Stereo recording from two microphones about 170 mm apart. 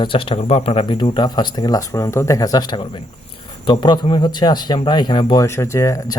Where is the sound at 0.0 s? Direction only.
30° left (ahead or behind).